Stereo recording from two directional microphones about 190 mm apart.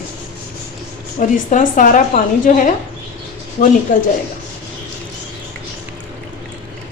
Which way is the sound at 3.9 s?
45° left (ahead or behind).